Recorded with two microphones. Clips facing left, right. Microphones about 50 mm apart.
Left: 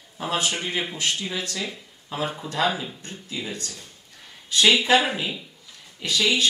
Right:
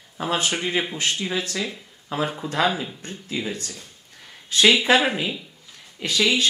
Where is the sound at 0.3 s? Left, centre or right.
Right.